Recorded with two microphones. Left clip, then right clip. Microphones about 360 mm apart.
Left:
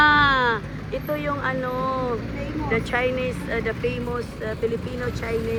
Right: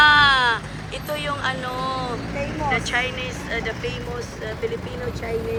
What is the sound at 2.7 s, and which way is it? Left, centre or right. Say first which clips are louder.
Speech: left 1 dB; centre.